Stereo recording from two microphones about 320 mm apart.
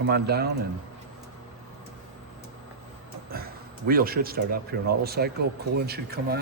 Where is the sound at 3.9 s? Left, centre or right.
Right.